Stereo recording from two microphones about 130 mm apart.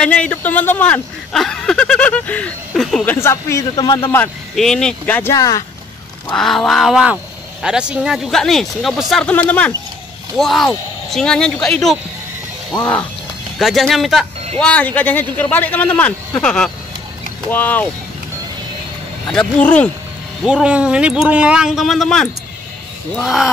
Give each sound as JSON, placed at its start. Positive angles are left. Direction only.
{"t": 0.0, "sound": "speech", "side_deg": 10}
{"t": 3.1, "sound": "speech", "side_deg": 20}
{"t": 4.6, "sound": "speech", "side_deg": 5}
{"t": 5.3, "sound": "speech", "side_deg": 25}
{"t": 6.2, "sound": "speech", "side_deg": 5}
{"t": 10.3, "sound": "speech", "side_deg": 0}
{"t": 13.6, "sound": "speech", "side_deg": 0}
{"t": 14.6, "sound": "speech", "side_deg": 10}
{"t": 19.3, "sound": "speech", "side_deg": 10}
{"t": 20.4, "sound": "speech", "side_deg": -10}